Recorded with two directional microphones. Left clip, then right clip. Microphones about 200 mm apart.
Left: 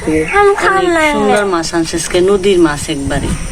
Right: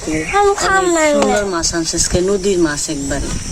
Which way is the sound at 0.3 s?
50° right (ahead or behind).